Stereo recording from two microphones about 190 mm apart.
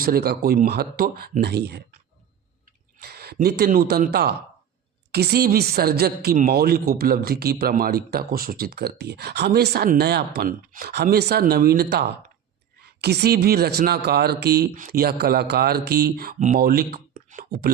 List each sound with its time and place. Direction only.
0.0 s a woman's voice: 55° right (ahead or behind)
3.0 s a woman's voice: 55° right (ahead or behind)